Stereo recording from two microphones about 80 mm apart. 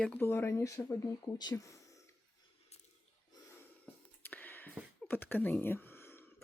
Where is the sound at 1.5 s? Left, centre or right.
Left.